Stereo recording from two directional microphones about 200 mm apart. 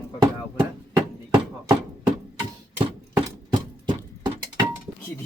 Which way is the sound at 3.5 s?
25° right (ahead or behind).